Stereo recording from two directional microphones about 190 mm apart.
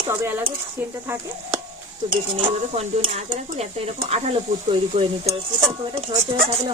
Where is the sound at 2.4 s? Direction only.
30° right (ahead or behind).